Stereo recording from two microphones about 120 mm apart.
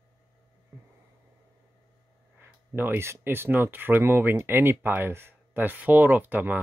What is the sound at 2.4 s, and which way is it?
Speech, 15° right (ahead or behind).